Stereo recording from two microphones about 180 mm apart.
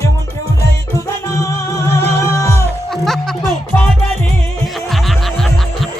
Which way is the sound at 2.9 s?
Centre (ahead or behind).